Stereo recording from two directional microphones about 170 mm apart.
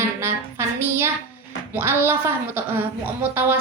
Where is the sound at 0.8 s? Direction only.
15° right (ahead or behind).